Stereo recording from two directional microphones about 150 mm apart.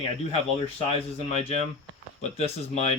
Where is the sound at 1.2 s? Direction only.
40° left (ahead or behind).